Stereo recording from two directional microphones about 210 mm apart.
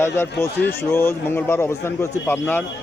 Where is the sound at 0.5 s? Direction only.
55° left (ahead or behind).